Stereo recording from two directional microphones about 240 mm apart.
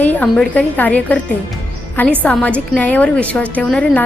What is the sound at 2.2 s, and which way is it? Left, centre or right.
A woman's voice, centre.